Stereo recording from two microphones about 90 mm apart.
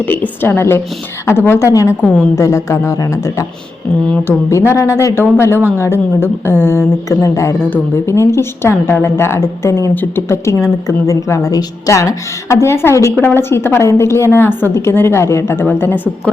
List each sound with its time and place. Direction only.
0.0 s a woman's voice: 20° left (ahead or behind)
4.1 s a woman's voice: 25° left (ahead or behind)
10.2 s a woman's voice: 30° left (ahead or behind)